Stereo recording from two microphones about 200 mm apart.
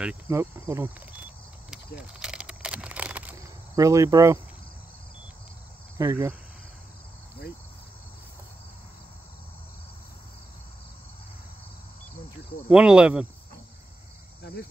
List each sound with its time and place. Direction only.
0.0 s insect: 10° right (ahead or behind)
1.7 s a sound: 5° right (ahead or behind)
3.7 s insect: 15° right (ahead or behind)
5.9 s insect: 15° right (ahead or behind)
12.6 s cricket: 5° right (ahead or behind)